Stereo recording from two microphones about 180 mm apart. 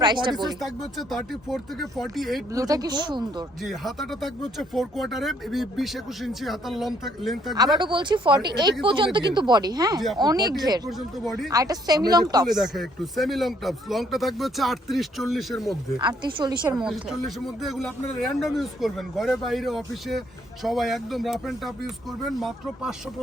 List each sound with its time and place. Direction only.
0.0 s speech: 25° right (ahead or behind)
0.6 s speech: centre (ahead or behind)
2.5 s speech: 20° right (ahead or behind)
3.6 s speech: centre (ahead or behind)
7.5 s speech: 20° right (ahead or behind)
10.8 s speech: centre (ahead or behind)
11.5 s speech: 20° right (ahead or behind)
12.5 s speech: centre (ahead or behind)
16.0 s speech: 25° right (ahead or behind)
16.7 s speech: centre (ahead or behind)